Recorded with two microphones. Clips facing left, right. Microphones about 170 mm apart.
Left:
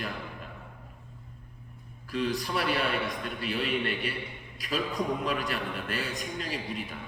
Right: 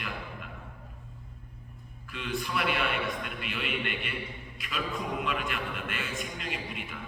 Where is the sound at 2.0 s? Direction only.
35° left (ahead or behind).